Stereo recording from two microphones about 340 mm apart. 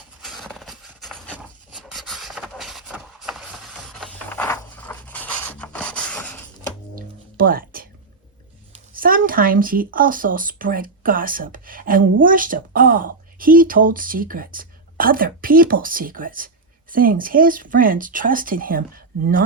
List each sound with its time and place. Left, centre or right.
0.2 s a sound: centre
6.9 s music: right
8.9 s speech: right